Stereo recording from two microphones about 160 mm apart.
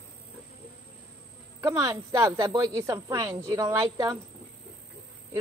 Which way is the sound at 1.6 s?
20° right (ahead or behind).